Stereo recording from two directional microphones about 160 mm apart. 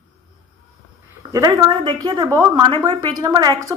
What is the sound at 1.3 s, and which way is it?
A woman's voice, 20° right (ahead or behind).